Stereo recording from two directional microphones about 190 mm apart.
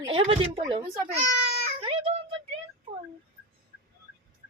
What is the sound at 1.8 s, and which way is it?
Music, 30° right (ahead or behind).